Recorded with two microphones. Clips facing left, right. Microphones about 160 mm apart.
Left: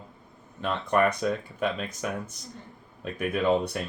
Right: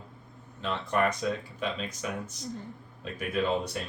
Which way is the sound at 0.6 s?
55° left (ahead or behind).